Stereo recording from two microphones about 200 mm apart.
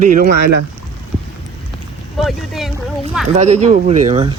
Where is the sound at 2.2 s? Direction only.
Centre (ahead or behind).